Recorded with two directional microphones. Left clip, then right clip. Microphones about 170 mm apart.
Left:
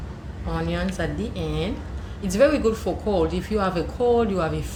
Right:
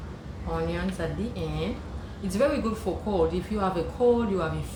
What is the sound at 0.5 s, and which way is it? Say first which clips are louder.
Speech: left 3 dB; 40° left (ahead or behind).